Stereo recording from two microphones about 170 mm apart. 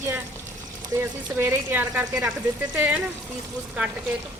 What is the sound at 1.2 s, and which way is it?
Speech, 15° right (ahead or behind).